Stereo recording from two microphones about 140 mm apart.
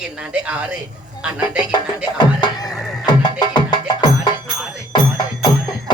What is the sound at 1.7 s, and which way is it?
Music, 35° left (ahead or behind).